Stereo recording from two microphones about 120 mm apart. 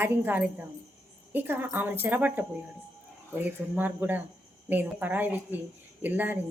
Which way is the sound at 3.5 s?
15° right (ahead or behind).